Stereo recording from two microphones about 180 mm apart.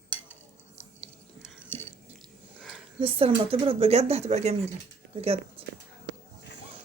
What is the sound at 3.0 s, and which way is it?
Speech, 30° right (ahead or behind).